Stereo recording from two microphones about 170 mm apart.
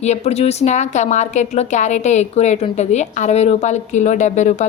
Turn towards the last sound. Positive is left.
turn(degrees=45)  # may be behind; listen again after turning